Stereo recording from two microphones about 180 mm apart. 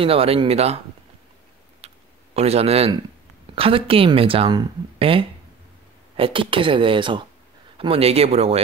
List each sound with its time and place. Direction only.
0.0 s speech: 30° right (ahead or behind)
2.3 s speech: 35° right (ahead or behind)